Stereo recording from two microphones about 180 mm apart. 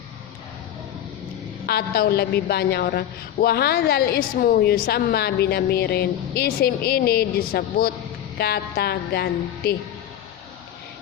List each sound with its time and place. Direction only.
1.6 s a woman's voice: 60° left (ahead or behind)